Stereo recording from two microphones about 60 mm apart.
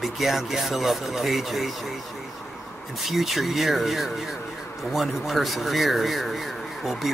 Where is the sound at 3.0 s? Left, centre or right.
Centre.